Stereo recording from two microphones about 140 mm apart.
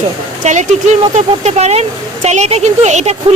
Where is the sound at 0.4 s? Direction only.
55° right (ahead or behind).